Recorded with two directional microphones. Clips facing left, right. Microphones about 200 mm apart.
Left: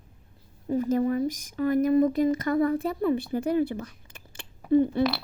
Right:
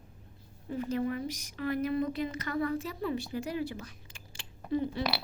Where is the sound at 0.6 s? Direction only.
40° left (ahead or behind).